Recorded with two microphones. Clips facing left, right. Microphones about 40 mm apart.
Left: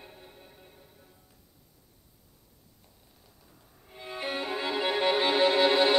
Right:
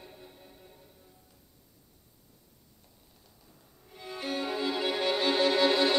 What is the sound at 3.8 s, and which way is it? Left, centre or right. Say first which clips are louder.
Violin: left 1 dB; left.